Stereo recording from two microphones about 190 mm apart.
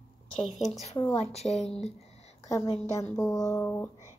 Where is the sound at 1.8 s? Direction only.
35° left (ahead or behind).